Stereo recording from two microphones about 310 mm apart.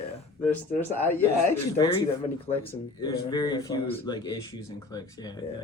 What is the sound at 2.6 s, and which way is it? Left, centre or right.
Speech, centre.